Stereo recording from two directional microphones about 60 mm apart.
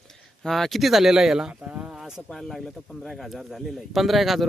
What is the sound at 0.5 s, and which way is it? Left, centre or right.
Speech, centre.